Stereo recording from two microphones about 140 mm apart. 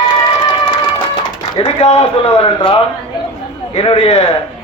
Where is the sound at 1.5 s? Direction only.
40° left (ahead or behind).